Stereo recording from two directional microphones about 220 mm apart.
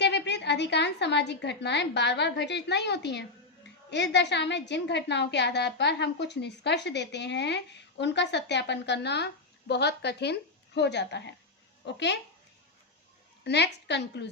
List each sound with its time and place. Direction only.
0.0 s a woman's voice: 50° left (ahead or behind)
13.4 s a woman's voice: 50° left (ahead or behind)